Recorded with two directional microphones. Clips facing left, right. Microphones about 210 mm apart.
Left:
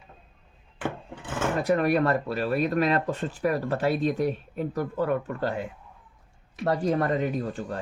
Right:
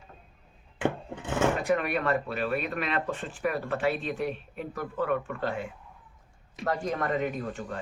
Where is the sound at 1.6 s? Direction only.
40° left (ahead or behind).